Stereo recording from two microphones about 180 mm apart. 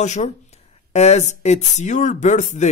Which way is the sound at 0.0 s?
40° left (ahead or behind).